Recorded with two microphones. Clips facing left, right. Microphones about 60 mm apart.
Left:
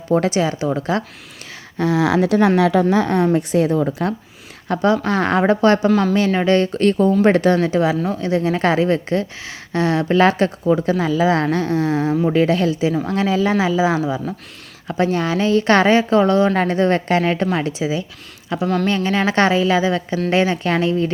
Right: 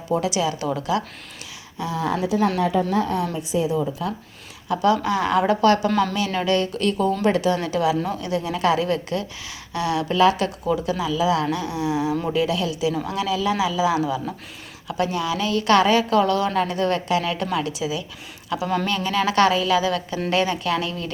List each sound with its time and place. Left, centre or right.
0.1 s speech: left
0.6 s speech: left
1.8 s speech: left
2.6 s a woman's voice: left
2.9 s speech: left
3.3 s a woman's voice: left
4.7 s speech: left
5.9 s speech: centre
6.4 s speech: left
7.6 s speech: left
11.5 s a sound: left
12.3 s speech: left
18.6 s speech: centre
18.9 s a woman's voice: left